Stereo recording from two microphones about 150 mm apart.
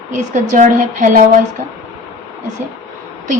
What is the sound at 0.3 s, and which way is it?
Speech, 55° right (ahead or behind).